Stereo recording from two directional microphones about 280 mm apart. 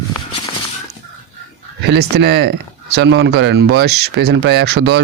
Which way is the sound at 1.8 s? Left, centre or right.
Right.